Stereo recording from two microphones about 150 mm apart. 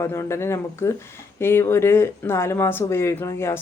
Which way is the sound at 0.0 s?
20° left (ahead or behind).